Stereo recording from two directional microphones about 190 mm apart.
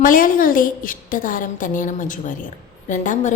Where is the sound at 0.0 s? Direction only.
45° left (ahead or behind).